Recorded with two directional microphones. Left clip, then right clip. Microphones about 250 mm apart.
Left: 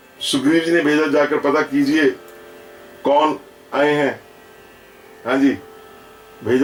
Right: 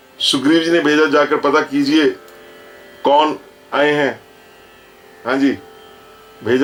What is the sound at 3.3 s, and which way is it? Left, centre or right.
Speech, centre.